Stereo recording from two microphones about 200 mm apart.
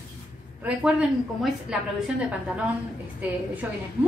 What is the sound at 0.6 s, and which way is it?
A woman's voice, 5° right (ahead or behind).